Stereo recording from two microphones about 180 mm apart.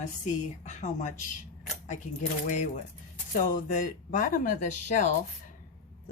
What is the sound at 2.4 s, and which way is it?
Speech, 40° left (ahead or behind).